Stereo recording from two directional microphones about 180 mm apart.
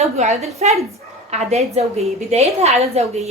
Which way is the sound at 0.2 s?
35° right (ahead or behind).